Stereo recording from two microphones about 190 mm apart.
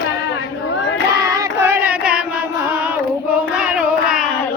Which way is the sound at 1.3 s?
15° right (ahead or behind).